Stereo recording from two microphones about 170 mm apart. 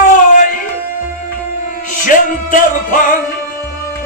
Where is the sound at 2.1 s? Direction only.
50° left (ahead or behind).